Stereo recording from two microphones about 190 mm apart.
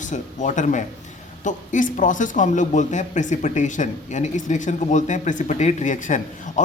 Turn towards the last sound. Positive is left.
turn(degrees=40)  # may be behind; listen again after turning